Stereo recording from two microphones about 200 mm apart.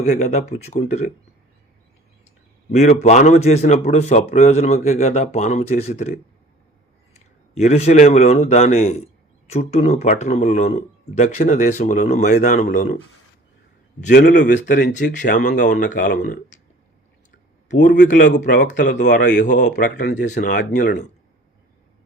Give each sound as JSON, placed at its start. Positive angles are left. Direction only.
{"t": 0.1, "sound": "a man's voice", "side_deg": 35}
{"t": 2.7, "sound": "a man's voice", "side_deg": 35}
{"t": 7.1, "sound": "a man's voice", "side_deg": 35}
{"t": 14.1, "sound": "speech", "side_deg": 60}
{"t": 14.5, "sound": "speech", "side_deg": 40}
{"t": 17.7, "sound": "a man's voice", "side_deg": 40}